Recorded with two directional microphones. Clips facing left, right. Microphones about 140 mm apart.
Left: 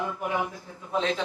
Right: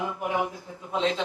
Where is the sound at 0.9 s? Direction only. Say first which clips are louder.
Right 1 dB; 20° right (ahead or behind).